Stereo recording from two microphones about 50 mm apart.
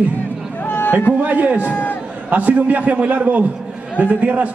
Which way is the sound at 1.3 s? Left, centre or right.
Right.